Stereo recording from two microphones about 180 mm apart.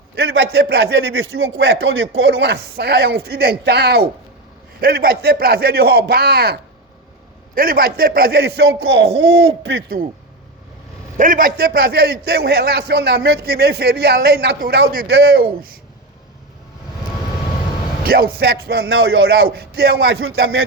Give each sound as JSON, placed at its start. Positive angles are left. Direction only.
{"t": 0.2, "sound": "a sound", "side_deg": -65}
{"t": 0.5, "sound": "a man's voice", "side_deg": -60}
{"t": 1.5, "sound": "a man's voice", "side_deg": -90}
{"t": 9.6, "sound": "a man's voice", "side_deg": -65}
{"t": 11.2, "sound": "a man's voice", "side_deg": -50}
{"t": 18.0, "sound": "a man's voice", "side_deg": -60}